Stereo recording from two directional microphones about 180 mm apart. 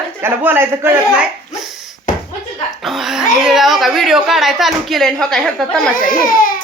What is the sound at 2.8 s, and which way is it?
Speech, centre (ahead or behind).